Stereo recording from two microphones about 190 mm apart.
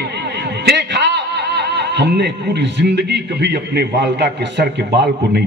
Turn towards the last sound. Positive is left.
turn(degrees=-65)  # may be behind; listen again after turning